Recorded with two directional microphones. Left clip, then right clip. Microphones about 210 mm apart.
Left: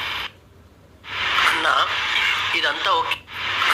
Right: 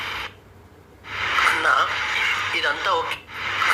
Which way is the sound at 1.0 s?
30° left (ahead or behind).